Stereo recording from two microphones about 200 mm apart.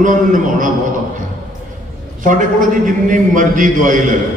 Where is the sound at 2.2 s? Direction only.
40° right (ahead or behind).